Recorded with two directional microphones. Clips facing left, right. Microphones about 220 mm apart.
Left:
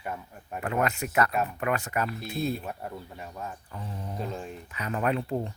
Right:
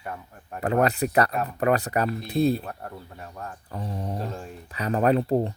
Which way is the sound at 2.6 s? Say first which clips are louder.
Even; 5° left (ahead or behind).